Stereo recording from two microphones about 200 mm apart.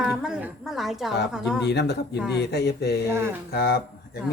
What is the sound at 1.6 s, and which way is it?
A man's voice, 55° left (ahead or behind).